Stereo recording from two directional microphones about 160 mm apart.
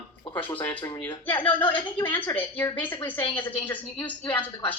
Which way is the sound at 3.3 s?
30° left (ahead or behind).